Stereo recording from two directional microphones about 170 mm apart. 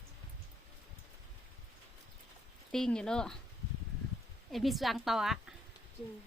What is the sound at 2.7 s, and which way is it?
Speech, 5° left (ahead or behind).